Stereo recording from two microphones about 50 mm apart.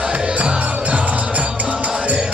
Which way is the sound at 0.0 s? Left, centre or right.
Right.